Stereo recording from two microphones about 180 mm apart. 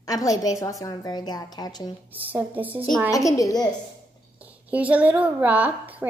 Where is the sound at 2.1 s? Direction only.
10° right (ahead or behind).